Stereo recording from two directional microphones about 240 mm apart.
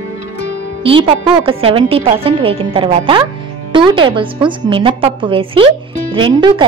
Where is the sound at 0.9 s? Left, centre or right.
Right.